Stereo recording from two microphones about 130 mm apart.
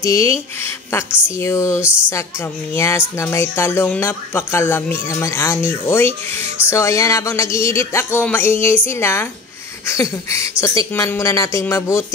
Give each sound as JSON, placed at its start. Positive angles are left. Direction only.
{"t": 0.0, "sound": "speech", "side_deg": 25}